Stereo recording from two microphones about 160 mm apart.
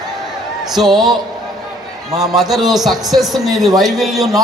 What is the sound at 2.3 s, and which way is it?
A man's voice, centre (ahead or behind).